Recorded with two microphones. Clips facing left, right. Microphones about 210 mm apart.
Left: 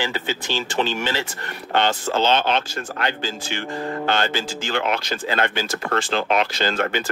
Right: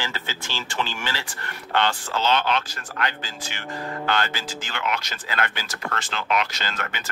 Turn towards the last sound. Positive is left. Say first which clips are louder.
# left 10 dB
turn(degrees=35)  # may be behind; listen again after turning